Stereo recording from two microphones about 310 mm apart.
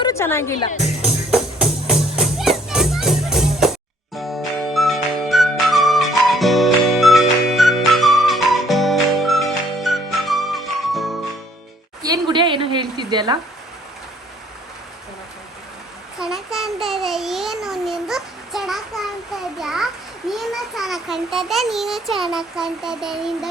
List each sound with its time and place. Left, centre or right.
0.0 s speech: centre
0.8 s music: centre
12.0 s a sound: centre
16.1 s a child's voice: centre